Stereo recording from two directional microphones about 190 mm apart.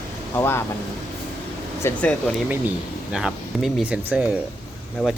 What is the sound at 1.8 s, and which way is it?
Speech, 15° left (ahead or behind).